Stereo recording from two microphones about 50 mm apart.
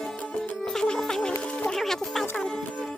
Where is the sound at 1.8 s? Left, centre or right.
Centre.